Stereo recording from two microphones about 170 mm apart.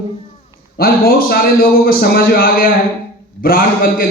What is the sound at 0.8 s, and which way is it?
A man's voice, 60° left (ahead or behind).